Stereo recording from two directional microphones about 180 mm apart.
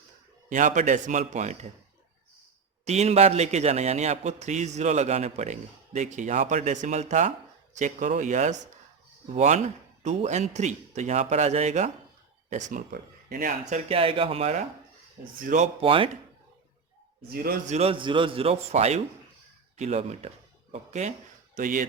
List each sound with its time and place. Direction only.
0.5 s a man's voice: 45° right (ahead or behind)
2.8 s a man's voice: 35° right (ahead or behind)
12.9 s speech: 60° right (ahead or behind)
13.7 s a man's voice: 35° right (ahead or behind)
17.2 s a man's voice: 55° right (ahead or behind)
17.7 s a man's voice: 35° right (ahead or behind)